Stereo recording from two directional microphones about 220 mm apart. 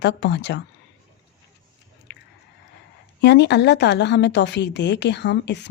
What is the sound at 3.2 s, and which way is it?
A woman's voice, 50° left (ahead or behind).